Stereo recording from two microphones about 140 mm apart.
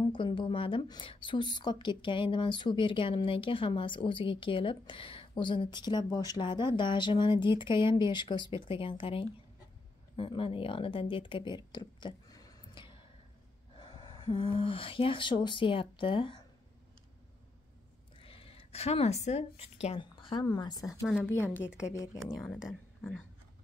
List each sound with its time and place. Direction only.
0.1 s a woman's voice: 35° left (ahead or behind)
18.1 s a woman's voice: 40° left (ahead or behind); by 22.2 s 20° left (ahead or behind)
22.4 s speech: centre (ahead or behind)